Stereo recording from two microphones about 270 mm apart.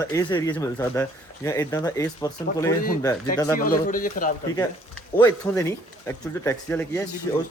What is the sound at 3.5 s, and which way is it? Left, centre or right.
Speech, left.